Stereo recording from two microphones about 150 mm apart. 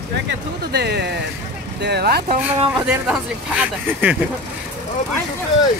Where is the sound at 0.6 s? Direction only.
90° right.